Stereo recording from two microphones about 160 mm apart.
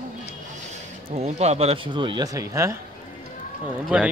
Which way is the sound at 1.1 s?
45° right (ahead or behind).